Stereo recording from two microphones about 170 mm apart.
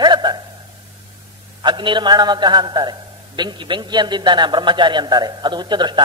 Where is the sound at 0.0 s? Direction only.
25° right (ahead or behind).